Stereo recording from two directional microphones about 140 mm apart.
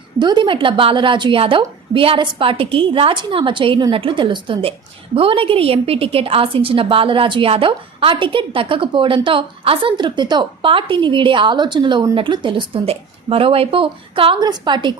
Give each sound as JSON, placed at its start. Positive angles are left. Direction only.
{"t": 0.2, "sound": "a woman's voice", "side_deg": -35}